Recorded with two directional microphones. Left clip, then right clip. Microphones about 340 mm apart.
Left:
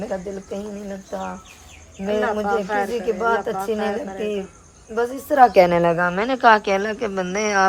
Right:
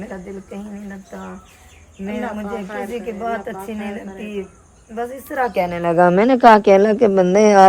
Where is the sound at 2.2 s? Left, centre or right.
Left.